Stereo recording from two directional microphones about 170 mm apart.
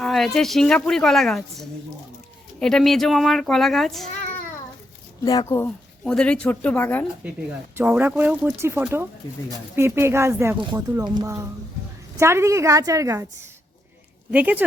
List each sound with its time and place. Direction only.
0.0 s a woman's voice: centre (ahead or behind)
5.2 s speech: 25° left (ahead or behind)
7.8 s speech: 10° right (ahead or behind)
14.3 s speech: 10° right (ahead or behind)